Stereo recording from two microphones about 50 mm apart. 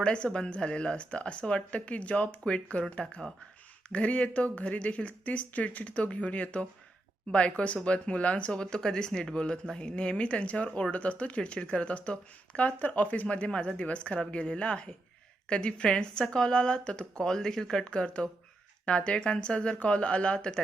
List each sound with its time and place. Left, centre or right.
0.0 s speech: centre
3.8 s speech: left
8.6 s speech: centre